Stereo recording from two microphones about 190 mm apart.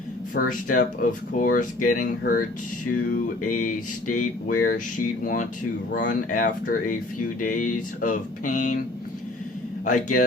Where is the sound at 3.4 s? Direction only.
45° left (ahead or behind).